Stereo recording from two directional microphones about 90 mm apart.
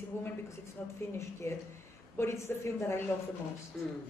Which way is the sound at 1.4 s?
30° left (ahead or behind).